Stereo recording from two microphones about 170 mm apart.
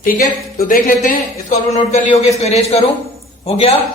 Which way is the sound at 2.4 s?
40° left (ahead or behind).